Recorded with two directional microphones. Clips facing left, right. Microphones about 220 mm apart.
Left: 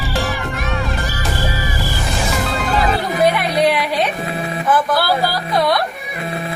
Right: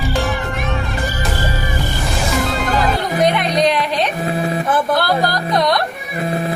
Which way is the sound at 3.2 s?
5° left (ahead or behind).